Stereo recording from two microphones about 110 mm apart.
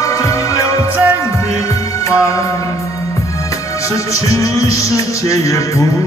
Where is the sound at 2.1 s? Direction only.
30° left (ahead or behind).